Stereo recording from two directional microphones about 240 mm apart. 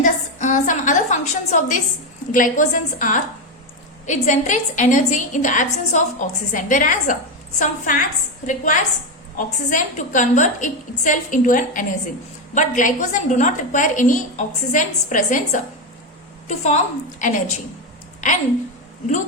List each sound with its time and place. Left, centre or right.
0.0 s a woman's voice: left